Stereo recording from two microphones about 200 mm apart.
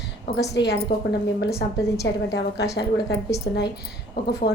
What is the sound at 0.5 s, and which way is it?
A woman's voice, 60° left (ahead or behind).